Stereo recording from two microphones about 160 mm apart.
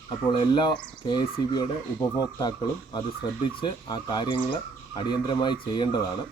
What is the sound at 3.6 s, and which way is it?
A man's voice, 30° left (ahead or behind).